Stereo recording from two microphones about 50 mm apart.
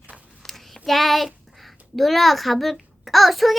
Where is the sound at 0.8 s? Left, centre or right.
Centre.